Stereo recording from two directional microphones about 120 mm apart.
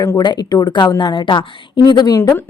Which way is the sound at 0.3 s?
35° left (ahead or behind).